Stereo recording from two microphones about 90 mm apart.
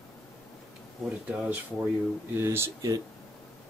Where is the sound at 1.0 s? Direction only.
15° right (ahead or behind).